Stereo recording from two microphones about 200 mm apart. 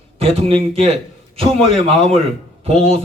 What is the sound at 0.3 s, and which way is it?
A man's voice, 30° right (ahead or behind).